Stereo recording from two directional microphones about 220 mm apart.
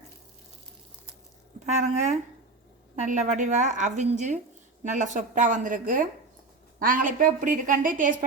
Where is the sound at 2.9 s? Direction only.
35° right (ahead or behind).